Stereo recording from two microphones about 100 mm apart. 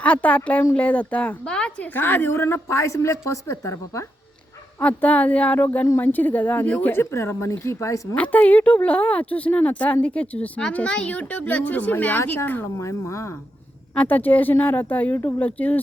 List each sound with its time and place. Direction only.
0.0 s a woman's voice: 15° left (ahead or behind); by 4.0 s 30° left (ahead or behind)
4.8 s a woman's voice: 15° left (ahead or behind); by 8.0 s 30° left (ahead or behind)
8.1 s a woman's voice: 15° left (ahead or behind)
12.7 s a woman's voice: 30° left (ahead or behind)
13.9 s a woman's voice: 15° left (ahead or behind)